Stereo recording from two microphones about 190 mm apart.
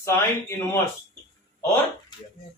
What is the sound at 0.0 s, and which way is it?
Speech, 15° left (ahead or behind).